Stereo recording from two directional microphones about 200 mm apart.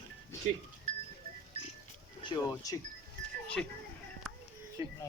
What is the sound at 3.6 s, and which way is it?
Speech, 5° left (ahead or behind).